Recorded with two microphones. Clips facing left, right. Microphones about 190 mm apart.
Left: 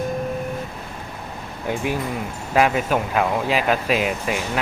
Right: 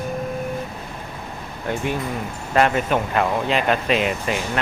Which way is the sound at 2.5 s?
5° left (ahead or behind).